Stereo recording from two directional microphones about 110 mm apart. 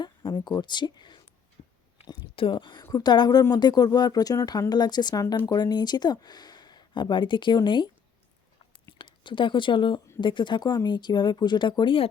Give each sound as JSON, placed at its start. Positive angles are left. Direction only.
{"t": 0.0, "sound": "speech", "side_deg": 45}
{"t": 1.6, "sound": "a sound", "side_deg": 90}
{"t": 2.3, "sound": "speech", "side_deg": 50}
{"t": 9.0, "sound": "speech", "side_deg": 50}